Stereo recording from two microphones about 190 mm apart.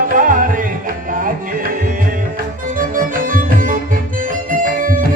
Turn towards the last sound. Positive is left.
turn(degrees=-45)  # may be behind; listen again after turning